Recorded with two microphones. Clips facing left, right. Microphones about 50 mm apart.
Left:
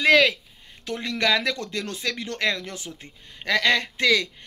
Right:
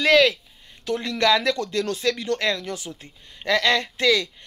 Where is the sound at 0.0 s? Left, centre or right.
Left.